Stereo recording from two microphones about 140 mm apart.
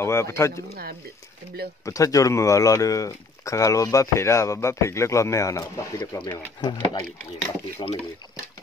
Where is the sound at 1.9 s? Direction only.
25° left (ahead or behind).